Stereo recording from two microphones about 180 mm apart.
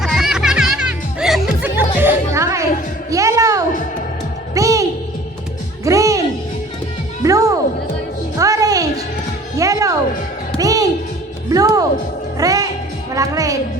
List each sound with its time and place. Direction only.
0.0 s music: centre (ahead or behind)
3.1 s a sound: 20° right (ahead or behind)
4.5 s music: 20° right (ahead or behind)
7.3 s music: 20° right (ahead or behind)